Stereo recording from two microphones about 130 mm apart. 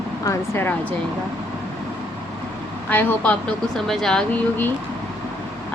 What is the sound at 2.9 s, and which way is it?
Speech, 15° left (ahead or behind).